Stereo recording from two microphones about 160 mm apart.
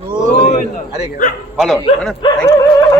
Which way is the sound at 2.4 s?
15° left (ahead or behind).